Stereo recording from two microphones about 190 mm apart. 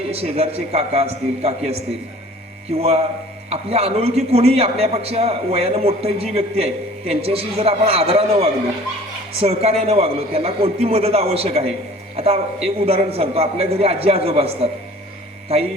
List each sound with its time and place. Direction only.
0.1 s a man's voice: 30° right (ahead or behind)